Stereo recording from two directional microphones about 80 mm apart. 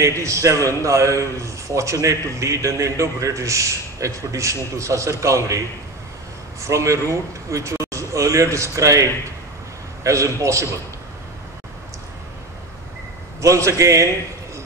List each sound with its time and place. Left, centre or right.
0.0 s a man's voice: right
6.7 s a man's voice: right
13.4 s a man's voice: right